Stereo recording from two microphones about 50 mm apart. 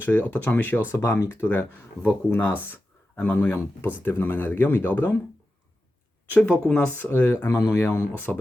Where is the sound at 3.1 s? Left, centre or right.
Left.